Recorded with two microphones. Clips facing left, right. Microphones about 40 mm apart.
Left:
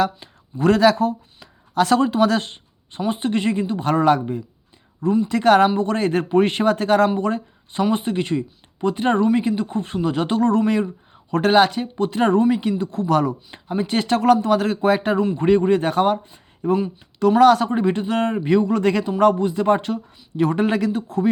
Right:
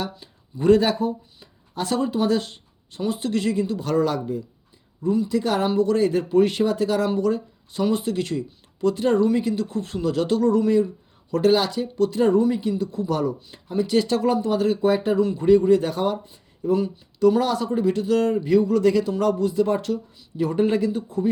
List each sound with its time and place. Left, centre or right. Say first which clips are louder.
0.0 s speech: left 10 dB; left
3.1 s speech: left 3 dB; left
5.3 s speech: left 7 dB; left
5.7 s speech: right 1 dB; left
7.9 s speech: left 1 dB; left
12.1 s speech: left 3 dB; left
13.5 s speech: right 1 dB; left
14.3 s speech: left 4 dB; left
15.4 s speech: right 1 dB; left
18.3 s speech: left 1 dB; left
20.9 s speech: left 3 dB; left